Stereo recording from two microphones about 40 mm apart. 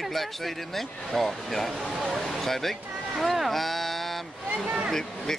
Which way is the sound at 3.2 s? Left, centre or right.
Centre.